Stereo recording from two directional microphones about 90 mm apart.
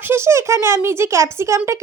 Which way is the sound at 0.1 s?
30° right (ahead or behind).